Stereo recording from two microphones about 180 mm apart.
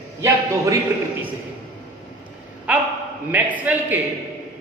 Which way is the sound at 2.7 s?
10° right (ahead or behind).